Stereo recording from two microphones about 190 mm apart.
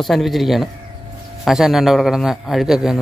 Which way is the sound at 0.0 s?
Centre (ahead or behind).